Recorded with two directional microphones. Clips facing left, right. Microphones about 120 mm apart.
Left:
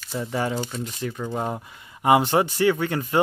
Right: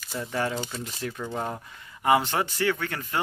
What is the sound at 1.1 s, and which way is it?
Speech, 10° left (ahead or behind).